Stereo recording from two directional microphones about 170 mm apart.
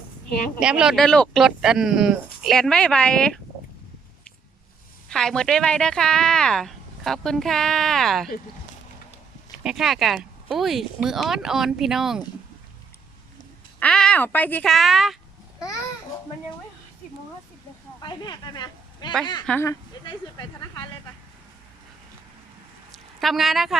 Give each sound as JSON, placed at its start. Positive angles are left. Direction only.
{"t": 0.6, "sound": "speech", "side_deg": -5}
{"t": 5.0, "sound": "speech", "side_deg": 5}
{"t": 9.6, "sound": "speech", "side_deg": 0}
{"t": 13.7, "sound": "speech", "side_deg": 5}
{"t": 18.0, "sound": "a sound", "side_deg": 25}
{"t": 19.2, "sound": "speech", "side_deg": 25}
{"t": 19.5, "sound": "speech", "side_deg": 10}
{"t": 20.1, "sound": "speech", "side_deg": 25}
{"t": 22.9, "sound": "a sound", "side_deg": 0}